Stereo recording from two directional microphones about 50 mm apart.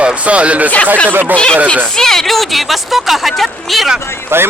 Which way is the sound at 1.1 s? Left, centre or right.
Right.